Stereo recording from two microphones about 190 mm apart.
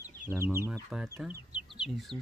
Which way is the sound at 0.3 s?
15° right (ahead or behind).